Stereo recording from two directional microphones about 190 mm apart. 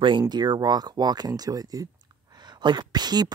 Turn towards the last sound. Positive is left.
turn(degrees=-20)  # may be behind; listen again after turning